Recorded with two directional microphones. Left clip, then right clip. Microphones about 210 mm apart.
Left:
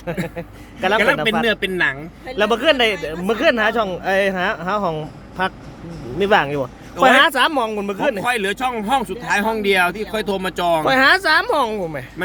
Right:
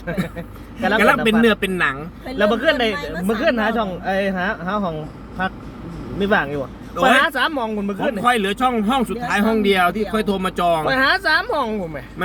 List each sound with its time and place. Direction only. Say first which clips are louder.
0.0 s speech: left 1 dB; 30° left (ahead or behind)
8.2 s speech: right 2 dB; 25° left (ahead or behind)